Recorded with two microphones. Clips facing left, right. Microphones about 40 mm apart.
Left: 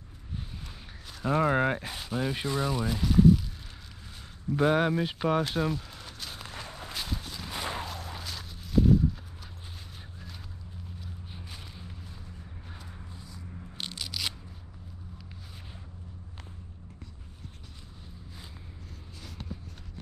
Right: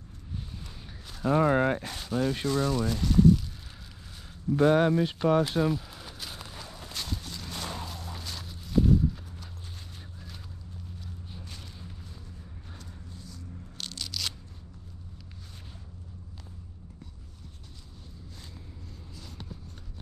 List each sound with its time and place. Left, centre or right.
1.1 s speech: centre
4.5 s speech: centre
6.4 s walk: left
6.9 s a sound: centre
7.9 s horse: centre
11.3 s a sound: centre
12.7 s tearing: centre